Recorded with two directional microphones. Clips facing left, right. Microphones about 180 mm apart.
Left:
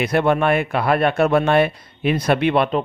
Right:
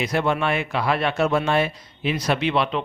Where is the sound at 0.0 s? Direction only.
55° left (ahead or behind).